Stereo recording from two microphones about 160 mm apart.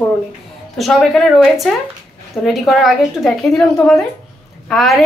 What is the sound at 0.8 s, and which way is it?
A woman's voice, centre (ahead or behind).